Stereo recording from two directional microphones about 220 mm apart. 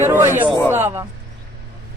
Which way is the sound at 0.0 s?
10° right (ahead or behind).